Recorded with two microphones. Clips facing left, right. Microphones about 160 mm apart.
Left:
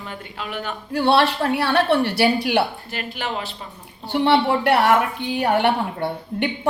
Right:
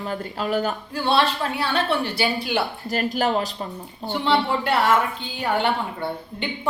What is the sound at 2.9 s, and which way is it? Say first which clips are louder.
Speech: right 10 dB; 40° right (ahead or behind).